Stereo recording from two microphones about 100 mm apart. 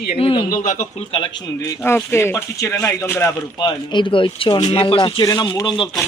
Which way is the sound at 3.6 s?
50° left (ahead or behind).